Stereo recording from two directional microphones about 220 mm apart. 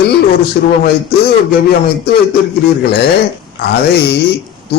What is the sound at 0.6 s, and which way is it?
Speech, 45° left (ahead or behind).